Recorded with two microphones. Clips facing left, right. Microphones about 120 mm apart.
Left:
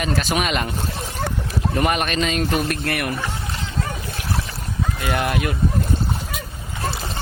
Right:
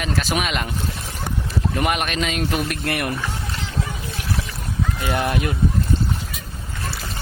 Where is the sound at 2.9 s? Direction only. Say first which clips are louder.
Even; 25° right (ahead or behind).